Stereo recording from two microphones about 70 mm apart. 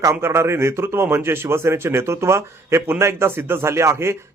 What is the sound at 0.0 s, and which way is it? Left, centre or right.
Speech, right.